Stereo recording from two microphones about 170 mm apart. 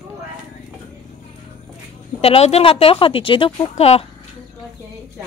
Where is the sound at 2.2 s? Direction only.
35° left (ahead or behind).